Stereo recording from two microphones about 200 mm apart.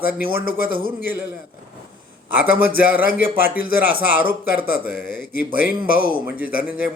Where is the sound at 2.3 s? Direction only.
5° right (ahead or behind).